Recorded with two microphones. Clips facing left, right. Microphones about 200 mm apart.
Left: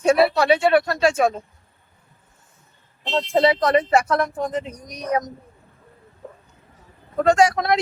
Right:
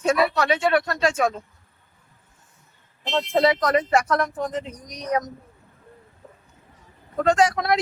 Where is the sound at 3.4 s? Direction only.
30° left (ahead or behind).